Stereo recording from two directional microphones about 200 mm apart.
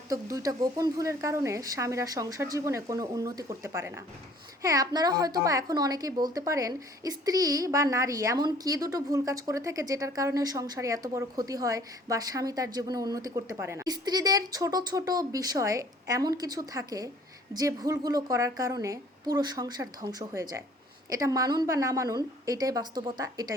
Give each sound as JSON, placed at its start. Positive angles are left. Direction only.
{"t": 0.1, "sound": "a child's voice", "side_deg": -15}